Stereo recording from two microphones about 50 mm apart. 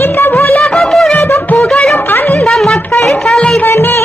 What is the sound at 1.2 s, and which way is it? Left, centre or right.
Music, left.